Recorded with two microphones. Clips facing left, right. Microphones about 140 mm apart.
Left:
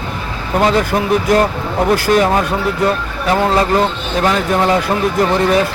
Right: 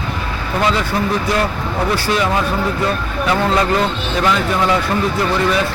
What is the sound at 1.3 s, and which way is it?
A man's voice, 50° left (ahead or behind).